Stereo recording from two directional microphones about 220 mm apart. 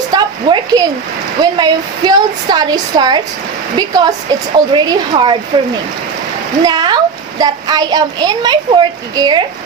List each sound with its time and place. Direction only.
0.1 s a sound: 20° right (ahead or behind)
1.4 s a woman's voice: 20° right (ahead or behind)
6.6 s a woman's voice: 20° right (ahead or behind)